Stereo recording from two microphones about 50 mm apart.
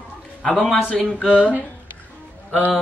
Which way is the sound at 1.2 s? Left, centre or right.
Right.